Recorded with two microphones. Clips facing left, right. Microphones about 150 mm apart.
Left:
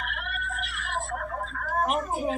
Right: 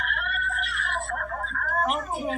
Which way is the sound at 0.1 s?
55° right (ahead or behind).